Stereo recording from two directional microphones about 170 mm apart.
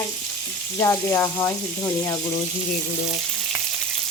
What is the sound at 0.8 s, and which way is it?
Speech, 15° left (ahead or behind).